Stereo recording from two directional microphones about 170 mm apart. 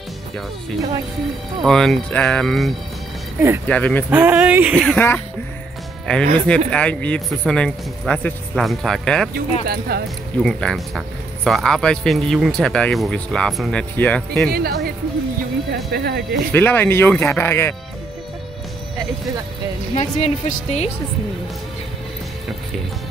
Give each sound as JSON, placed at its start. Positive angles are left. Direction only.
{"t": 1.6, "sound": "speech", "side_deg": 0}
{"t": 3.3, "sound": "speech", "side_deg": -15}
{"t": 3.6, "sound": "speech", "side_deg": 5}
{"t": 4.1, "sound": "speech", "side_deg": -10}
{"t": 4.7, "sound": "speech", "side_deg": 10}
{"t": 6.3, "sound": "speech", "side_deg": 5}
{"t": 9.7, "sound": "speech", "side_deg": -65}
{"t": 10.4, "sound": "speech", "side_deg": 5}
{"t": 14.5, "sound": "speech", "side_deg": -65}
{"t": 16.5, "sound": "speech", "side_deg": 10}
{"t": 20.0, "sound": "a woman's voice", "side_deg": 40}